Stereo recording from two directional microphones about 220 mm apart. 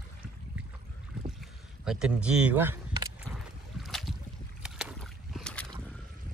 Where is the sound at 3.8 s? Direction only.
Centre (ahead or behind).